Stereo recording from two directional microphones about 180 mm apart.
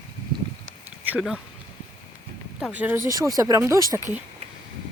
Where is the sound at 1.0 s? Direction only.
5° right (ahead or behind).